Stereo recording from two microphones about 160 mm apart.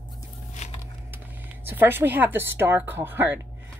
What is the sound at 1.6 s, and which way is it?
A woman's voice, 15° right (ahead or behind).